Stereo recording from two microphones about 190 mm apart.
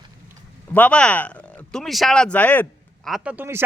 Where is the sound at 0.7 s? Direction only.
5° left (ahead or behind).